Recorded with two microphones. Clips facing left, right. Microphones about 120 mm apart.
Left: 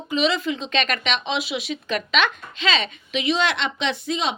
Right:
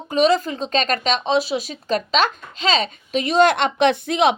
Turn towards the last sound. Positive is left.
turn(degrees=-60)  # may be behind; listen again after turning